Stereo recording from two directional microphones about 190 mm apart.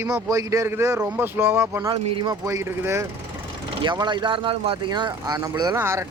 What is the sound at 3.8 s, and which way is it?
Speech, 25° right (ahead or behind).